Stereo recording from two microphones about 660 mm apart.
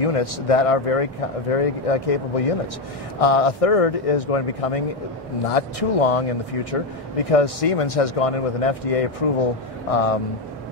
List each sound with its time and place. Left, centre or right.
0.0 s speech: left